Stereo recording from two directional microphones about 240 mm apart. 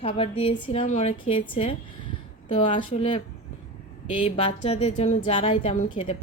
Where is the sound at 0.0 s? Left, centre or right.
Left.